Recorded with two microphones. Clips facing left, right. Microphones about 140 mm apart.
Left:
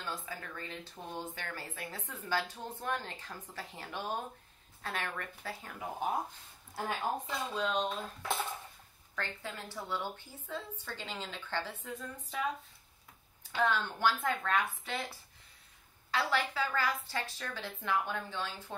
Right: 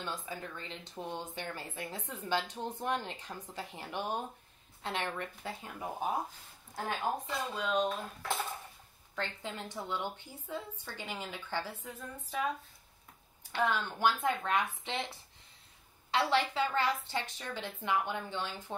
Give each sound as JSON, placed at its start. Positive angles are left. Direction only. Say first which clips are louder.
{"t": 0.0, "sound": "speech", "louder": "right 2 dB", "side_deg": -20}
{"t": 7.2, "sound": "speech", "louder": "even", "side_deg": -5}
{"t": 9.1, "sound": "a woman's voice", "louder": "right 2 dB", "side_deg": -20}
{"t": 13.6, "sound": "a woman's voice", "louder": "even", "side_deg": -10}